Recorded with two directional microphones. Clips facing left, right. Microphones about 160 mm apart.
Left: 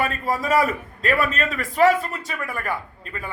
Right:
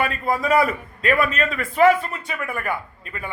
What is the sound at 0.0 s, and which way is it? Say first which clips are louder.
A man's voice: right 1 dB; 40° left (ahead or behind).